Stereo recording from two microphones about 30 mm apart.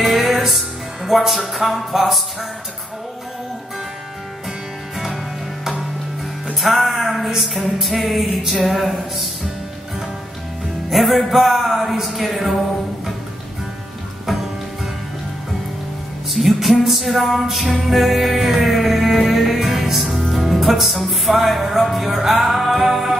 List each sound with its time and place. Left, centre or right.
0.0 s music: centre
4.9 s music: centre
6.6 s music: centre
10.9 s music: centre
16.3 s music: centre